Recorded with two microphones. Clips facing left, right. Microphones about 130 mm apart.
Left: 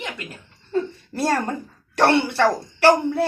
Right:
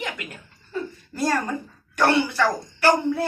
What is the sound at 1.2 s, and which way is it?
Speech, 25° left (ahead or behind).